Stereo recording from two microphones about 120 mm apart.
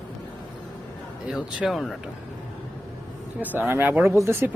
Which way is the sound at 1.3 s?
Centre (ahead or behind).